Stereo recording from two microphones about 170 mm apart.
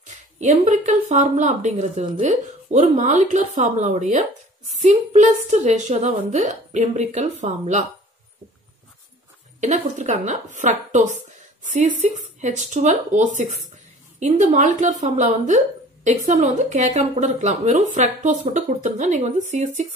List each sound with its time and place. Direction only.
0.0 s speech: 45° right (ahead or behind)
9.6 s speech: 45° right (ahead or behind)